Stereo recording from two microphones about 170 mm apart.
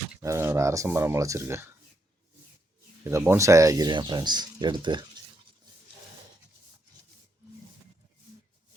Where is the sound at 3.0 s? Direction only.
15° right (ahead or behind).